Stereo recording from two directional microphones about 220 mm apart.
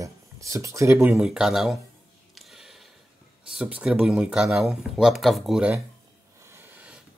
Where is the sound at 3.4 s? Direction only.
5° right (ahead or behind).